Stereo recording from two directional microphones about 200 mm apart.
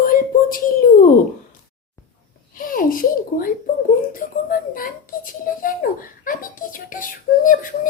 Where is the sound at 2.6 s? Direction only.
45° left (ahead or behind).